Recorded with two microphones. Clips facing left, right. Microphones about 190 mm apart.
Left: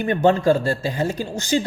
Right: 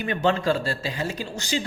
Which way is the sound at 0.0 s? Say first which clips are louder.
Left 6 dB; 50° left (ahead or behind).